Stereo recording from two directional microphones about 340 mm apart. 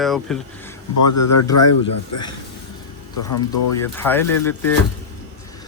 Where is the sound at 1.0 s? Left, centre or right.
Left.